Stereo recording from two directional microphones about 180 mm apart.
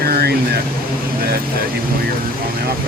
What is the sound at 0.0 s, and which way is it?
Air conditioning, 60° right (ahead or behind).